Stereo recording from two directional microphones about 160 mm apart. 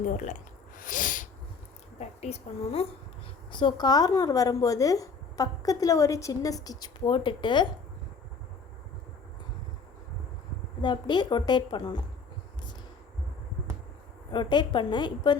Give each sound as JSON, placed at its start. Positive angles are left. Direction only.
{"t": 0.1, "sound": "speech", "side_deg": 50}
{"t": 0.8, "sound": "sneeze", "side_deg": 55}
{"t": 2.0, "sound": "a woman's voice", "side_deg": 40}
{"t": 3.5, "sound": "speech", "side_deg": 30}
{"t": 10.8, "sound": "speech", "side_deg": 30}
{"t": 14.3, "sound": "speech", "side_deg": 30}